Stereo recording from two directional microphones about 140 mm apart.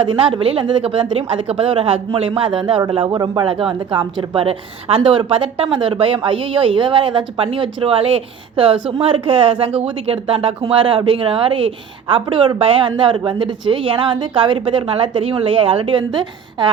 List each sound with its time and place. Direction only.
0.0 s speech: 35° right (ahead or behind)